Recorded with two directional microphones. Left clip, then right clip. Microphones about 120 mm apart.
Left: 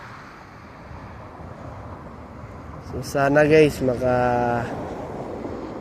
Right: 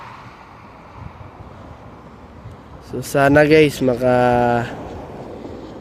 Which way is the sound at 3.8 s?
90° right.